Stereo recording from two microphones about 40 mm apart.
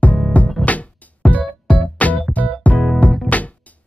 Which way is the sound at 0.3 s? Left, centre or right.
Left.